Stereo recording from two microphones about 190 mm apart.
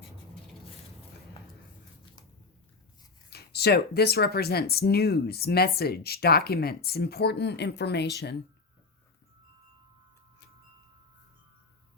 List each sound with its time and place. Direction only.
3.2 s speech: 60° left (ahead or behind)